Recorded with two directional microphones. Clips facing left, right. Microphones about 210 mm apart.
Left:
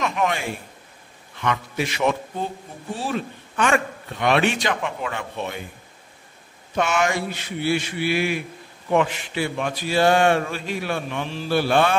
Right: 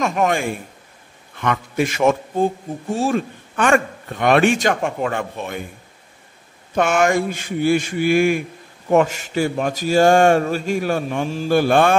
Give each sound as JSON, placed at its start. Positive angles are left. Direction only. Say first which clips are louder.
{"t": 0.0, "sound": "a man's voice", "louder": "right 5 dB", "side_deg": -45}
{"t": 6.7, "sound": "a man's voice", "louder": "right 5 dB", "side_deg": -50}